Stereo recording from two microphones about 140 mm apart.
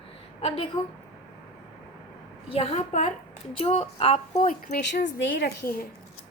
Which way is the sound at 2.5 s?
50° left (ahead or behind).